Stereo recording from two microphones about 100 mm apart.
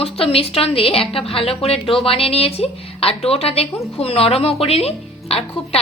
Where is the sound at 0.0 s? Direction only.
75° left (ahead or behind).